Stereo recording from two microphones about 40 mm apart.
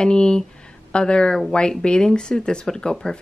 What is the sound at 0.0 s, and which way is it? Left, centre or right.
Speech, left.